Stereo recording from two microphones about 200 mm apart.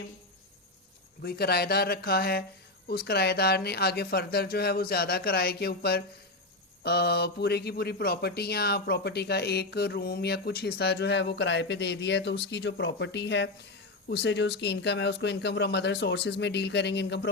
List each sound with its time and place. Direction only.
1.2 s speech: 50° left (ahead or behind)